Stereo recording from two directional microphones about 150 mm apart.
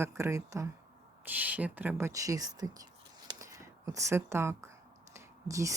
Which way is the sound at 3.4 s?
20° right (ahead or behind).